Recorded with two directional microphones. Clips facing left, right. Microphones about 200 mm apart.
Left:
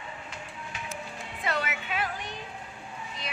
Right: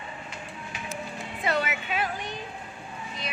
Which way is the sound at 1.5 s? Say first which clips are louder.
Right 4 dB; 5° right (ahead or behind).